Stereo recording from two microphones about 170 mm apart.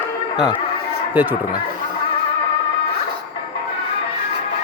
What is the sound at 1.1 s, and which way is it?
Speech, 10° right (ahead or behind).